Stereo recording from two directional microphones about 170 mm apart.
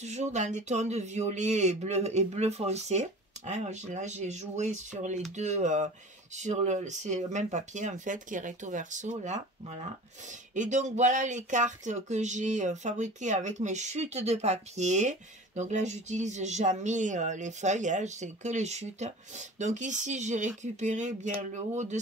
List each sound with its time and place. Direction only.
0.0 s speech: 40° right (ahead or behind)